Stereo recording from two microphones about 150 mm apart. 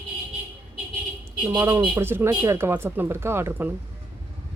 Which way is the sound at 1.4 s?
20° right (ahead or behind).